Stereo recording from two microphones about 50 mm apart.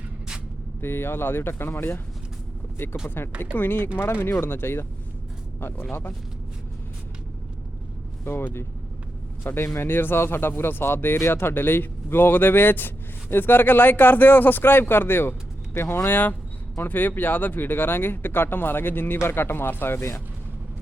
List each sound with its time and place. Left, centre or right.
0.8 s speech: left
3.4 s speech: left
8.2 s speech: left
9.7 s speech: left